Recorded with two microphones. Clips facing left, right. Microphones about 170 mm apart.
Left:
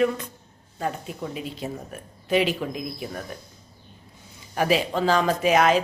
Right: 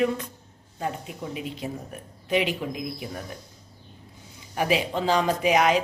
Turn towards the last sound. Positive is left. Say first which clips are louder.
# left 2 dB
turn(degrees=-15)  # may be behind; listen again after turning